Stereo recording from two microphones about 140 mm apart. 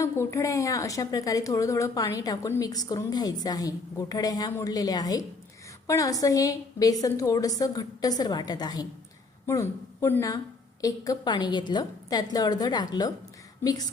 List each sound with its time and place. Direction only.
0.0 s a woman's voice: 20° left (ahead or behind)